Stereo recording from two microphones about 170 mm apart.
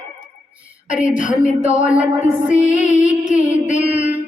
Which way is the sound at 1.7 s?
45° left (ahead or behind).